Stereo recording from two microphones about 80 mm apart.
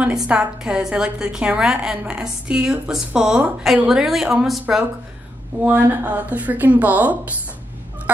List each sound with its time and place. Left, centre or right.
0.3 s a woman's voice: centre
5.6 s speech: right